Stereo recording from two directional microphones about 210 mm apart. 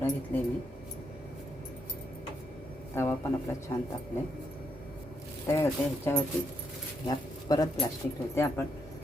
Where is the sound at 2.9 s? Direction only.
10° left (ahead or behind).